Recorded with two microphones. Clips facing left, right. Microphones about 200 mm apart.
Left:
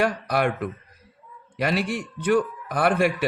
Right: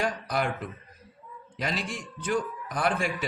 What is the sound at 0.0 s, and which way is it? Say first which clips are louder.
A man's voice: left 6 dB; 65° left (ahead or behind).